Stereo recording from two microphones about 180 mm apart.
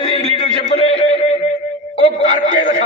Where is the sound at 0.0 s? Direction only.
40° left (ahead or behind).